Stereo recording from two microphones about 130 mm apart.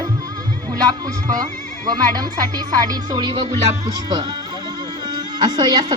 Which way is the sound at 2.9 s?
35° right (ahead or behind).